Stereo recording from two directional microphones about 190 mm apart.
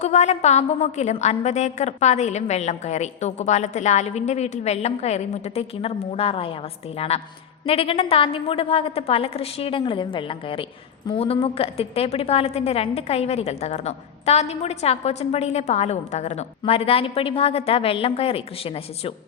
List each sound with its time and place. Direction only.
0.0 s a woman's voice: 35° left (ahead or behind)